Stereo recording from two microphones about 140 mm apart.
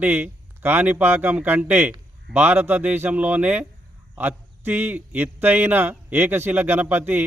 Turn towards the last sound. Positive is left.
turn(degrees=-15)  # may be behind; listen again after turning